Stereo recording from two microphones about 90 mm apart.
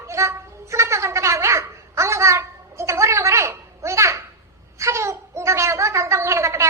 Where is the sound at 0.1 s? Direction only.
30° right (ahead or behind).